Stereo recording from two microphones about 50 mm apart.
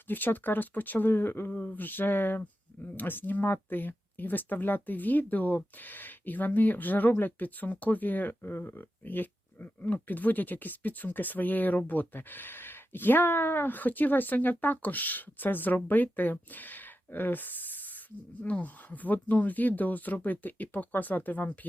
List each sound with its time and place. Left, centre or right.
0.1 s speech: left